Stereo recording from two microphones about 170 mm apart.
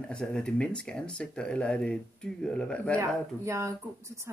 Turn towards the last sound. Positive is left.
turn(degrees=-15)  # may be behind; listen again after turning